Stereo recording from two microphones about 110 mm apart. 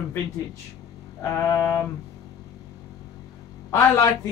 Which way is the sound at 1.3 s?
25° left (ahead or behind).